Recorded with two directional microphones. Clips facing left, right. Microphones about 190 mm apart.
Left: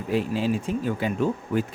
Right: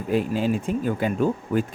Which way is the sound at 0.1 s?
50° right (ahead or behind).